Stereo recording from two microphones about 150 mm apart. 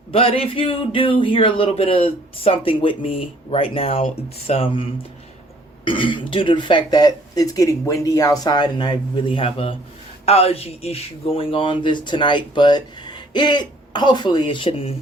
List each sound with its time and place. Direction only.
0.1 s speech: 40° left (ahead or behind)